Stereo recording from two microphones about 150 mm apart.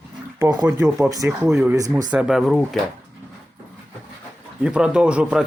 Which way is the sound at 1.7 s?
25° right (ahead or behind).